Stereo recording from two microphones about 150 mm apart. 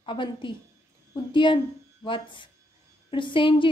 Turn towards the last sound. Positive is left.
turn(degrees=35)  # may be behind; listen again after turning